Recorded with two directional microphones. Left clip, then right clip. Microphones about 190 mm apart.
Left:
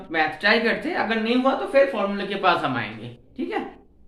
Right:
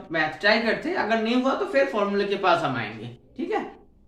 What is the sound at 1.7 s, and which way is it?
Speech, 20° left (ahead or behind).